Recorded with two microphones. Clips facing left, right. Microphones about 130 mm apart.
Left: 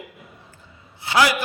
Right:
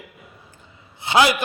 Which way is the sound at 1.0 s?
20° right (ahead or behind).